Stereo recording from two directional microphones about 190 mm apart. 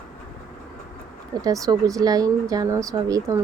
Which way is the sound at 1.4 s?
20° right (ahead or behind).